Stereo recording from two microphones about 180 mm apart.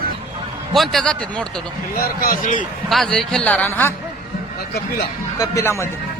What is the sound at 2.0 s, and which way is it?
Speech, 55° left (ahead or behind).